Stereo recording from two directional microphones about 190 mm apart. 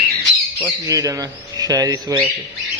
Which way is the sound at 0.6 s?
15° right (ahead or behind).